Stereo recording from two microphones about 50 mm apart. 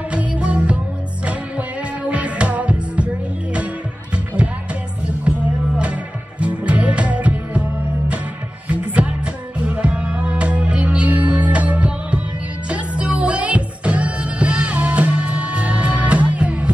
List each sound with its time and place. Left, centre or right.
0.1 s music: right
6.4 s music: right
8.6 s music: right